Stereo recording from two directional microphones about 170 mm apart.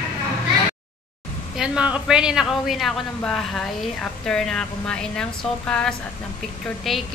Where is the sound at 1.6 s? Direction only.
5° right (ahead or behind).